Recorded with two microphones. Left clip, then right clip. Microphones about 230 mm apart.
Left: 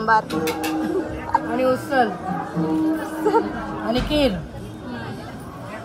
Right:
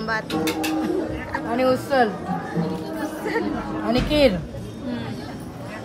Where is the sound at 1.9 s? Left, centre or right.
Right.